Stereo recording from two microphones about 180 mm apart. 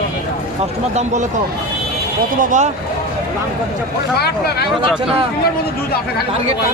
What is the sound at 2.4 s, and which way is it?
Speech, 45° right (ahead or behind).